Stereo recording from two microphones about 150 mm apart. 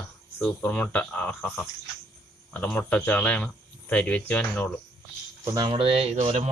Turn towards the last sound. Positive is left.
turn(degrees=-50)  # may be behind; listen again after turning